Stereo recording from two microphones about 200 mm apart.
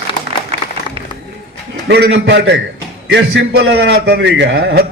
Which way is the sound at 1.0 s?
30° right (ahead or behind).